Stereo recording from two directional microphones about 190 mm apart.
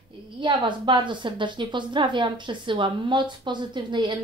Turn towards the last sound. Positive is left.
turn(degrees=-25)  # may be behind; listen again after turning